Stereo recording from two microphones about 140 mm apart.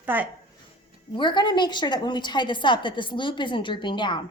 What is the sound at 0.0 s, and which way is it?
Speech, 15° right (ahead or behind).